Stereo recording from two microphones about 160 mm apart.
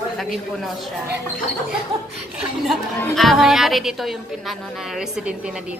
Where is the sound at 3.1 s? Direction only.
Centre (ahead or behind).